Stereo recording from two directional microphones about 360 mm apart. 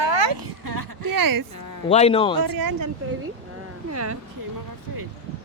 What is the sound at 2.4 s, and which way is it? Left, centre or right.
Speech, right.